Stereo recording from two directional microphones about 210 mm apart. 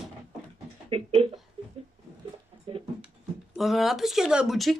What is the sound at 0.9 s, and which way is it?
Speech, 25° right (ahead or behind).